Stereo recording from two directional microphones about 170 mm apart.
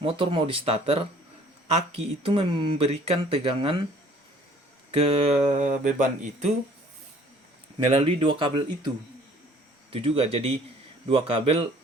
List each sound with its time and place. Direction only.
0.0 s speech: 30° right (ahead or behind)
4.9 s speech: 35° right (ahead or behind)
7.9 s speech: 35° right (ahead or behind)
9.9 s speech: 35° right (ahead or behind)